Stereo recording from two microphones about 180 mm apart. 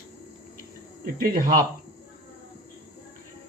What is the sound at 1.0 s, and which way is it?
Speech, 55° right (ahead or behind).